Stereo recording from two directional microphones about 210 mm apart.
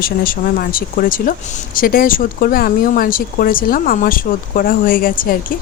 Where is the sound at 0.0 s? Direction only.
45° left (ahead or behind).